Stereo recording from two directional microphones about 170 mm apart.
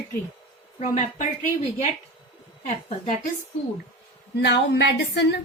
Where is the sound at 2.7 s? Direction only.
45° left (ahead or behind).